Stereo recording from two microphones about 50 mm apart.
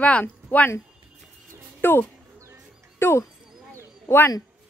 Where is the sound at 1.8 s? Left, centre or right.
Left.